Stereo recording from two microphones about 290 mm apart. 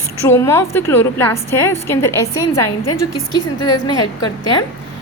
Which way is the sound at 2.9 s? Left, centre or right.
Left.